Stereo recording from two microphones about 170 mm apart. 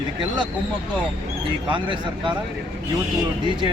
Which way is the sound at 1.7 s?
30° right (ahead or behind).